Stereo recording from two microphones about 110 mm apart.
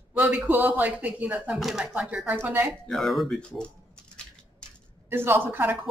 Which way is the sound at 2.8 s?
Centre (ahead or behind).